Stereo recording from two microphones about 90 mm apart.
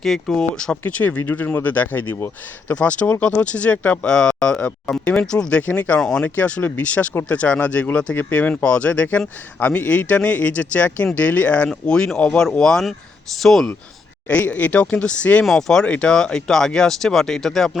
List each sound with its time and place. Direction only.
0.0 s speech: 5° left (ahead or behind)
6.0 s speech: 5° left (ahead or behind)
6.2 s speech: 15° left (ahead or behind)
14.3 s speech: 15° left (ahead or behind)
15.4 s speech: 5° left (ahead or behind)